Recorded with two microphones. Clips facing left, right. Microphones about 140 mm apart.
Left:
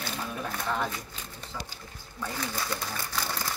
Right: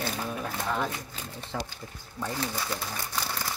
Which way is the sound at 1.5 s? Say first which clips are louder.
Right 6 dB; 70° right (ahead or behind).